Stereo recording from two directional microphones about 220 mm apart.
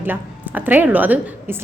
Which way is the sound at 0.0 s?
10° right (ahead or behind).